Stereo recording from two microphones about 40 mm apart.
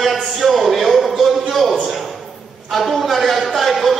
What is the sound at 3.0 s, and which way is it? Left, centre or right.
Speech, centre.